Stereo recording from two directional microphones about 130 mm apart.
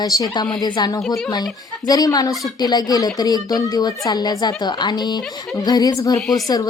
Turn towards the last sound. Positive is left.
turn(degrees=25)  # may be behind; listen again after turning